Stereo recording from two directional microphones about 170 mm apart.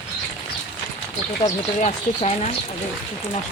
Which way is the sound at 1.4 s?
40° left (ahead or behind).